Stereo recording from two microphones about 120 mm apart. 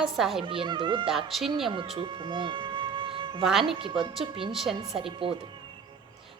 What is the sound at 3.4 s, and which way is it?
Speech, 5° right (ahead or behind).